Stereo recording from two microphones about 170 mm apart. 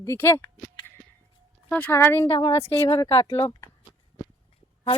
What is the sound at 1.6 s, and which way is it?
Speech, 10° left (ahead or behind).